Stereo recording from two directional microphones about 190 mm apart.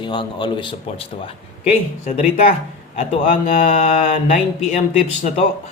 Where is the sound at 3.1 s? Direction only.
45° left (ahead or behind).